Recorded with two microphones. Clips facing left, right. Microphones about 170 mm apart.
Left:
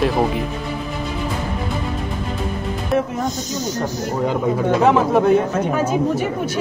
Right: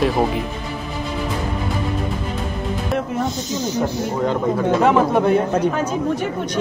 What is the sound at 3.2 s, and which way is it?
Speech, 45° left (ahead or behind).